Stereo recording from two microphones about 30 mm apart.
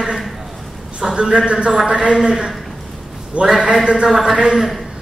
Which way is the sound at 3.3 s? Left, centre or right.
Right.